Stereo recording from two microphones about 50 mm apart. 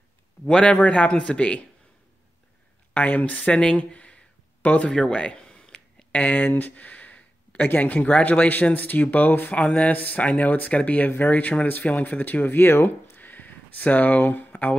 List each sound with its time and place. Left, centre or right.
0.5 s speech: centre
2.9 s speech: left
4.6 s speech: left
4.8 s speech: centre
6.1 s a sound: left
7.6 s speech: left
9.6 s speech: left
12.5 s speech: left
13.1 s a sound: left